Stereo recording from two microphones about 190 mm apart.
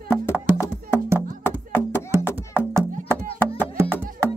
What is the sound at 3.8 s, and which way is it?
Music, 10° right (ahead or behind).